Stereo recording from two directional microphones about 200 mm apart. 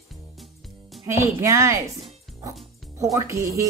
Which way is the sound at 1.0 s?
15° right (ahead or behind).